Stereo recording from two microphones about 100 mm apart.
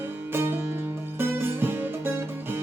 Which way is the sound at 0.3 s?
25° right (ahead or behind).